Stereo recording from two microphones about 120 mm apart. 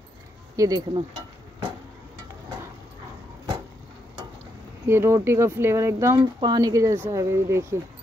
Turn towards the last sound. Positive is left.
turn(degrees=-25)  # may be behind; listen again after turning